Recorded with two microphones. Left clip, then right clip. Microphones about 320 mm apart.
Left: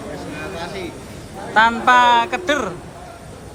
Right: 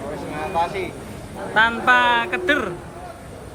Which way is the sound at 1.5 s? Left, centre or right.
Centre.